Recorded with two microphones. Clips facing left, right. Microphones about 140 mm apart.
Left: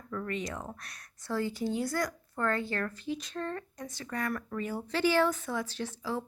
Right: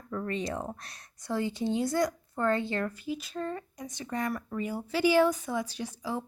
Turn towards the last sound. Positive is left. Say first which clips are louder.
# even
turn(degrees=-15)  # may be behind; listen again after turning